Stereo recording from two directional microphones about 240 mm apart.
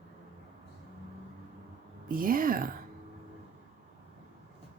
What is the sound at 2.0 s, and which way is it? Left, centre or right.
Speech, right.